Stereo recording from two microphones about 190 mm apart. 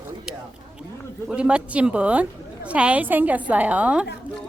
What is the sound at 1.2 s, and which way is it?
A woman's voice, 5° right (ahead or behind).